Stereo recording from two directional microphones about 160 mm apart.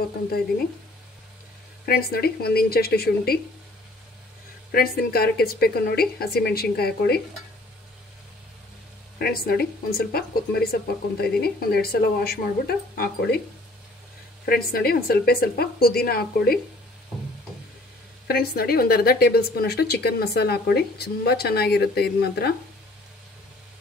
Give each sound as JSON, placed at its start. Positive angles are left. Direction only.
{"t": 1.9, "sound": "speech", "side_deg": 75}
{"t": 4.7, "sound": "speech", "side_deg": 70}
{"t": 9.2, "sound": "speech", "side_deg": 70}
{"t": 14.4, "sound": "speech", "side_deg": 70}
{"t": 18.2, "sound": "speech", "side_deg": 75}